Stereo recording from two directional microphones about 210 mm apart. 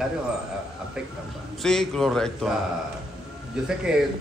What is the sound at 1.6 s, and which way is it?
Speech, centre (ahead or behind).